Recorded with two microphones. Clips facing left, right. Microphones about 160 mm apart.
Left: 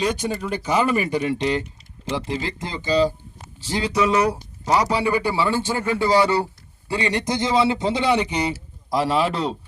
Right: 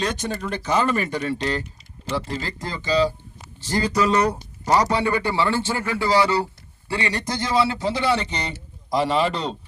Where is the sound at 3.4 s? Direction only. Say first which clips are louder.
Right 1 dB; 5° left (ahead or behind).